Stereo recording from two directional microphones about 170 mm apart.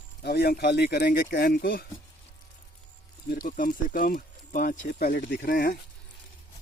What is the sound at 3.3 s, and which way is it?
Speech, 55° left (ahead or behind).